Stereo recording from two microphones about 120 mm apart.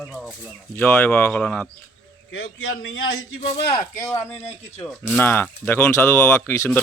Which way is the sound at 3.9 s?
25° left (ahead or behind).